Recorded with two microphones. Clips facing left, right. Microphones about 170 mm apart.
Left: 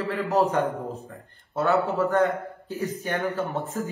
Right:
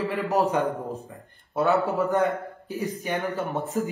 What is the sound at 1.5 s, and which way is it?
A man's voice, 20° right (ahead or behind).